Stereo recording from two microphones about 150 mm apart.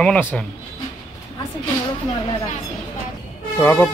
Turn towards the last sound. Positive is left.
turn(degrees=15)  # may be behind; listen again after turning